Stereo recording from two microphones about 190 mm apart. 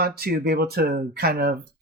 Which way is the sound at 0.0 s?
55° right (ahead or behind).